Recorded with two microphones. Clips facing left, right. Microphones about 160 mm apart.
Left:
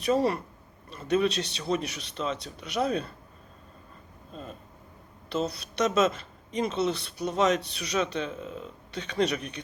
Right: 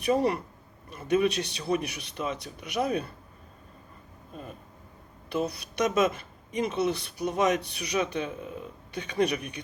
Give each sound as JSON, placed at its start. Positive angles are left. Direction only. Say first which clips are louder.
{"t": 0.0, "sound": "speech", "louder": "even", "side_deg": -15}
{"t": 5.3, "sound": "speech", "louder": "even", "side_deg": -15}